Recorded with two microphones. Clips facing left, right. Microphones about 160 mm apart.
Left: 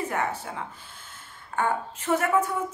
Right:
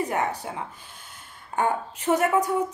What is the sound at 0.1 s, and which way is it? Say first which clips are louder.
Speech: right 2 dB; 15° right (ahead or behind).